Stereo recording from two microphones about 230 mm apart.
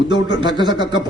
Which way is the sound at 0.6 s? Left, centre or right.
Centre.